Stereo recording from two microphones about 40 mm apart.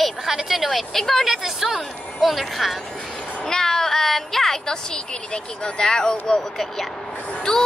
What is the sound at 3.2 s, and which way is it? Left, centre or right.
Cat, left.